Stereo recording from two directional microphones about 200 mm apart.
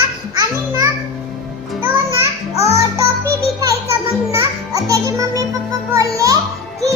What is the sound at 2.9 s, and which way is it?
Music, 15° right (ahead or behind).